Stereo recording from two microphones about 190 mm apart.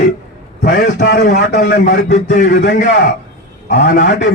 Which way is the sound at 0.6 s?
55° left (ahead or behind).